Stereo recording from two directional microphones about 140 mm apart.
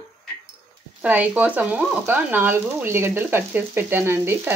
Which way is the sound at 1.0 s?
10° right (ahead or behind).